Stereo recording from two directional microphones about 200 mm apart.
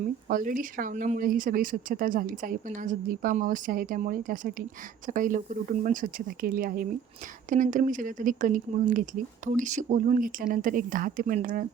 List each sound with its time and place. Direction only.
0.3 s speech: 45° right (ahead or behind)